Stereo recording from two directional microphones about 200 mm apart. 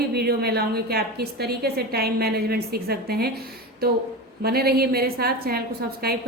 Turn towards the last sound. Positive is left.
turn(degrees=-50)  # may be behind; listen again after turning